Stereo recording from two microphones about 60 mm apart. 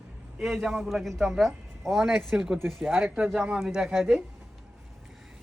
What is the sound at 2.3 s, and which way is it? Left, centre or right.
A man's voice, centre.